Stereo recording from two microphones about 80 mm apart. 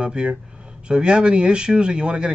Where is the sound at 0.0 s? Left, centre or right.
Centre.